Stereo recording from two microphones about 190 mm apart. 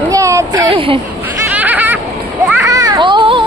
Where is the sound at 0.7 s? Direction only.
30° right (ahead or behind).